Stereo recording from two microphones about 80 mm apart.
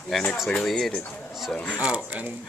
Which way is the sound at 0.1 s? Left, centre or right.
Centre.